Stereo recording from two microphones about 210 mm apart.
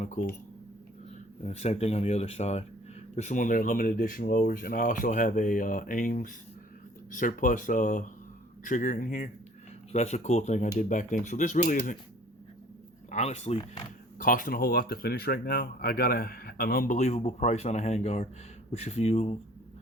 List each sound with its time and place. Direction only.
0.0 s speech: 40° left (ahead or behind)
1.5 s speech: 30° left (ahead or behind)
13.1 s speech: 30° left (ahead or behind)
14.2 s speech: 40° left (ahead or behind)